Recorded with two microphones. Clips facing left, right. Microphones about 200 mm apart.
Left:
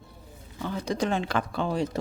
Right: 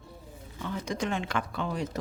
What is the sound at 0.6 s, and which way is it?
Speech, 35° left (ahead or behind).